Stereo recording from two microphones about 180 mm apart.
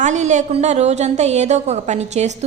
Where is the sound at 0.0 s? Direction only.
40° right (ahead or behind).